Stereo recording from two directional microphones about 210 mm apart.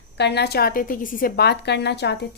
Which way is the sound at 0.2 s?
55° left (ahead or behind).